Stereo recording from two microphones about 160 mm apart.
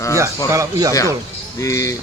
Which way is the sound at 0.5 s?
20° right (ahead or behind).